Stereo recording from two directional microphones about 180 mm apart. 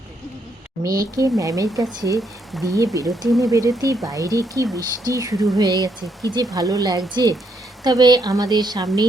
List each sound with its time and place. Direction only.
0.8 s speech: 20° right (ahead or behind)